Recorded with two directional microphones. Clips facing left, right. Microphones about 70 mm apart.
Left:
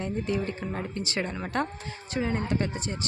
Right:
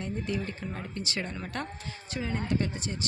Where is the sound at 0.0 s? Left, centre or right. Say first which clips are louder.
Left 4 dB; left.